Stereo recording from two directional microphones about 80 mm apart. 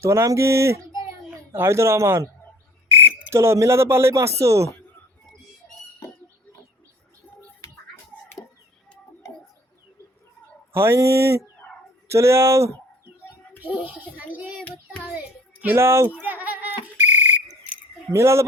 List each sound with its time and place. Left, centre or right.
0.0 s speech: right
10.8 s speech: right
13.6 s a child's voice: right
15.6 s speech: right
16.2 s a sound: right
18.1 s speech: right